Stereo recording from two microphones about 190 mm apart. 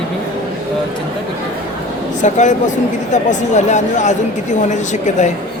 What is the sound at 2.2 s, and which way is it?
Speech, 40° left (ahead or behind).